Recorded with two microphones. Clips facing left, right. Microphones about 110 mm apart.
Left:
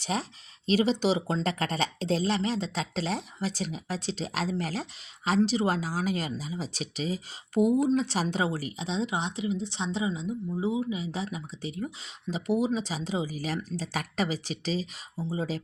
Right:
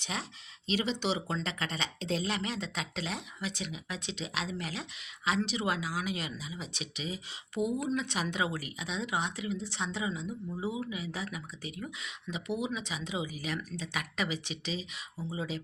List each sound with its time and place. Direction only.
0.0 s speech: 40° left (ahead or behind)